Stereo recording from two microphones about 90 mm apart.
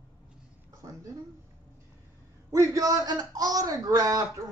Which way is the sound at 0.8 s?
40° right (ahead or behind).